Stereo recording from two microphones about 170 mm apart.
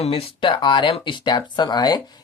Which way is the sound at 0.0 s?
35° left (ahead or behind).